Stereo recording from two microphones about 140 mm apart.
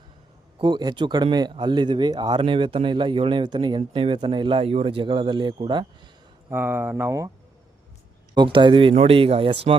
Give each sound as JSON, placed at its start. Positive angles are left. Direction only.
{"t": 0.6, "sound": "speech", "side_deg": -30}
{"t": 6.5, "sound": "speech", "side_deg": -15}
{"t": 8.4, "sound": "speech", "side_deg": -35}